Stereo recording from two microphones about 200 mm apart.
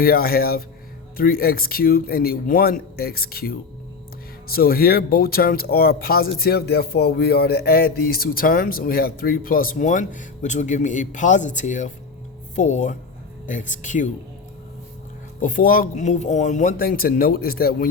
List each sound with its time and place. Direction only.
0.0 s speech: 50° left (ahead or behind)
4.5 s speech: 50° left (ahead or behind)
15.4 s speech: 40° left (ahead or behind)